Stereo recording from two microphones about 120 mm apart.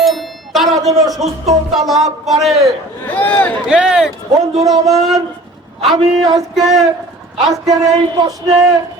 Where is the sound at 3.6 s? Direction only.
5° right (ahead or behind).